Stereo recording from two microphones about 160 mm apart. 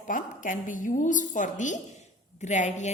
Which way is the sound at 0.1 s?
55° left (ahead or behind).